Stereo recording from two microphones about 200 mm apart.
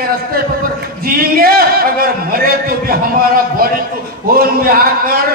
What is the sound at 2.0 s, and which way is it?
A man's voice, 45° right (ahead or behind).